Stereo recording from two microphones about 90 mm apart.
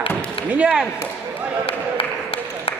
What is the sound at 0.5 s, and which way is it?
Speech, 15° right (ahead or behind).